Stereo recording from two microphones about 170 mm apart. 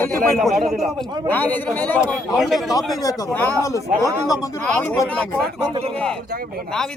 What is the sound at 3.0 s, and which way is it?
Speech, 10° left (ahead or behind).